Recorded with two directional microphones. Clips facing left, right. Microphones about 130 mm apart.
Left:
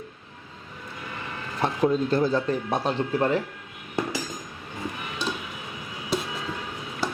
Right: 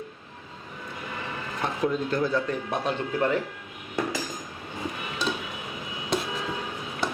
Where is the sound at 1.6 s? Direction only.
30° left (ahead or behind).